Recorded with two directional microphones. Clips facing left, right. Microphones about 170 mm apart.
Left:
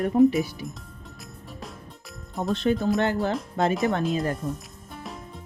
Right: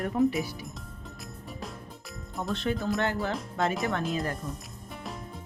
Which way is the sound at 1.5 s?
Centre (ahead or behind).